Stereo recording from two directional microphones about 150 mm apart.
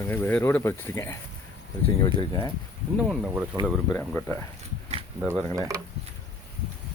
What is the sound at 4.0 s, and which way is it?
Speech, 10° left (ahead or behind).